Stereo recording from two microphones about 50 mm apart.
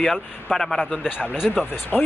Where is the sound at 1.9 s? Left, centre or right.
Centre.